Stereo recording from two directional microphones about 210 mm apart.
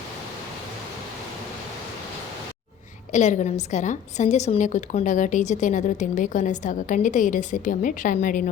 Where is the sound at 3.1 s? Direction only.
35° left (ahead or behind).